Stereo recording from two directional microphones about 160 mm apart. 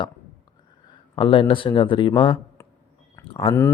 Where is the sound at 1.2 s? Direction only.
35° left (ahead or behind).